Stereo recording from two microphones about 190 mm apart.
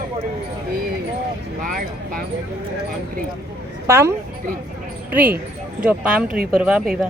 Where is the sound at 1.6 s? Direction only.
50° right (ahead or behind).